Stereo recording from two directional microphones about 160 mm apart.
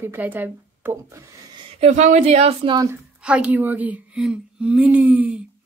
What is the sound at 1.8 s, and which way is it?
Speech, 45° right (ahead or behind).